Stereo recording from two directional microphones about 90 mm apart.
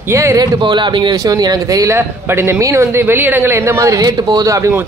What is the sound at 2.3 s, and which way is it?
A woman's voice, 25° right (ahead or behind).